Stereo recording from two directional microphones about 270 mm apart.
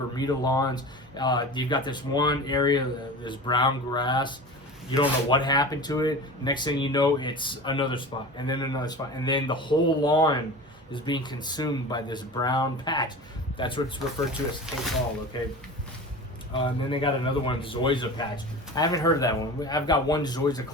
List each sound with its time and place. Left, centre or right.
0.1 s a man's voice: centre
14.7 s speech: centre
16.6 s a man's voice: centre